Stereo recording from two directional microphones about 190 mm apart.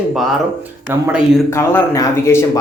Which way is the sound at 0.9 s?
5° right (ahead or behind).